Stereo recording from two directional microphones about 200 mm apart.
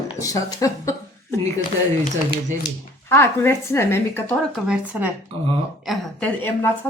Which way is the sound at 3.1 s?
10° left (ahead or behind).